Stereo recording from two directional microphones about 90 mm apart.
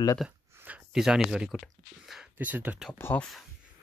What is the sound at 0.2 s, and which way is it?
Speech, centre (ahead or behind).